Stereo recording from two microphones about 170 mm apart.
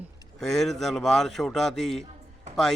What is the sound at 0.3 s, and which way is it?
A man's voice, centre (ahead or behind).